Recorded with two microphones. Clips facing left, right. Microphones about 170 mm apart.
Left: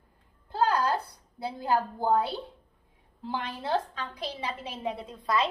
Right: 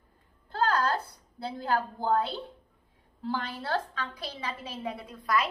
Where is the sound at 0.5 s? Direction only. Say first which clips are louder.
Left 1 dB; 10° left (ahead or behind).